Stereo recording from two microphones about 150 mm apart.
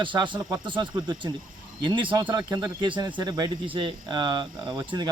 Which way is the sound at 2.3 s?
30° right (ahead or behind).